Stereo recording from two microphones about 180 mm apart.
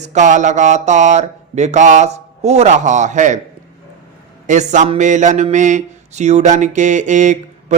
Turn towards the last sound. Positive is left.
turn(degrees=-40)  # may be behind; listen again after turning